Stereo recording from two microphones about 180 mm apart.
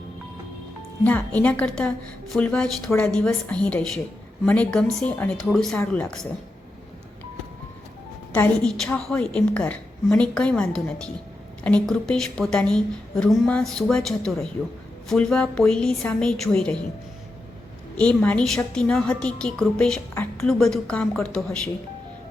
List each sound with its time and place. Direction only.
1.0 s a woman's voice: 10° left (ahead or behind)
8.3 s a woman's voice: 5° left (ahead or behind)
17.9 s a woman's voice: 5° left (ahead or behind)